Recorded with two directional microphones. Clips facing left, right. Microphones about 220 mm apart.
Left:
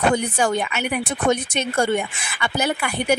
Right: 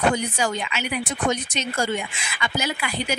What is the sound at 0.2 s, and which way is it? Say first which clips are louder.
Speech: left 4 dB; 55° left (ahead or behind).